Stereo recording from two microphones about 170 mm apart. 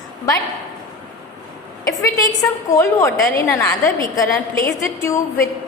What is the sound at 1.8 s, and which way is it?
A woman's voice, 20° left (ahead or behind).